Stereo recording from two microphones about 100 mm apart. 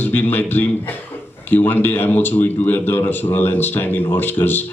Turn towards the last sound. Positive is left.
turn(degrees=20)  # may be behind; listen again after turning